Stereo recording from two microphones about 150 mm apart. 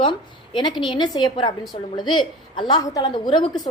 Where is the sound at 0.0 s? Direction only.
30° left (ahead or behind).